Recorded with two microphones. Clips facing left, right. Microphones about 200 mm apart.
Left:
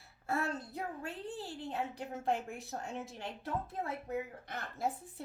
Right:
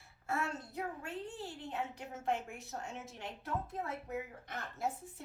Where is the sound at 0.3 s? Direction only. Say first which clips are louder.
Left 2 dB; 35° left (ahead or behind).